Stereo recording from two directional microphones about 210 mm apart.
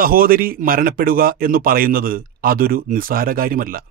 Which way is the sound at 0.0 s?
45° right (ahead or behind).